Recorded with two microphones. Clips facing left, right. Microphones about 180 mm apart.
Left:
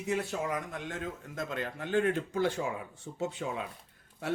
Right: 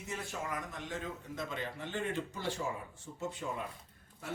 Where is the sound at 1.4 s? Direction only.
50° left (ahead or behind).